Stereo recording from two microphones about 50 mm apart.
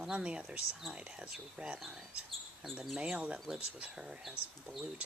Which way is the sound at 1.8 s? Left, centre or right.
Centre.